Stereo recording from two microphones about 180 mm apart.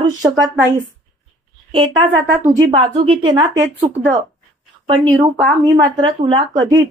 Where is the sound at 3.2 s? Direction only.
25° right (ahead or behind).